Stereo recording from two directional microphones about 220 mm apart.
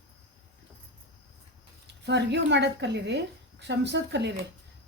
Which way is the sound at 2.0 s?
50° right (ahead or behind).